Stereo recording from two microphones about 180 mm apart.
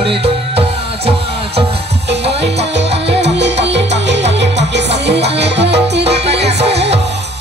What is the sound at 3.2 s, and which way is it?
Music, 75° right (ahead or behind).